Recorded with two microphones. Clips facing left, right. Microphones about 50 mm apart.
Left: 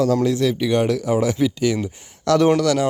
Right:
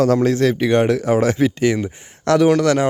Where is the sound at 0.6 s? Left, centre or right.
Right.